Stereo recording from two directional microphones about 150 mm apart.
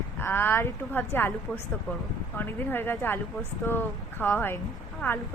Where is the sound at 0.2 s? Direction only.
15° left (ahead or behind).